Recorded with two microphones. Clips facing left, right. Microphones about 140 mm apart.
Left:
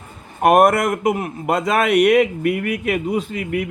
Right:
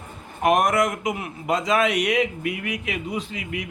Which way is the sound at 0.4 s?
55° left (ahead or behind).